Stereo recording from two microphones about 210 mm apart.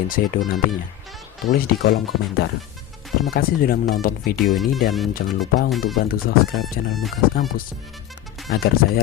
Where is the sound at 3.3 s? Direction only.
45° left (ahead or behind).